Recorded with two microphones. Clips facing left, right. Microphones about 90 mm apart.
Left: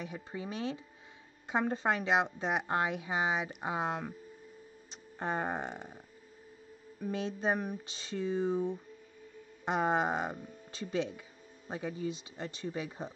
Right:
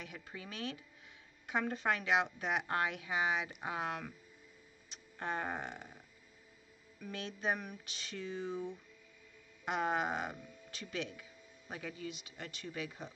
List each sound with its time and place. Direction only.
0.0 s speech: 30° left (ahead or behind)
5.2 s speech: 30° left (ahead or behind)
7.0 s speech: 35° left (ahead or behind)